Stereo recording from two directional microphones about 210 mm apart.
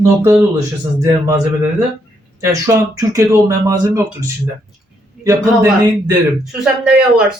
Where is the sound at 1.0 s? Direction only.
15° right (ahead or behind).